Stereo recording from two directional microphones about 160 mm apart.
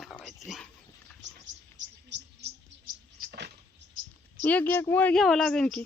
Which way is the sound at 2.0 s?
90° right.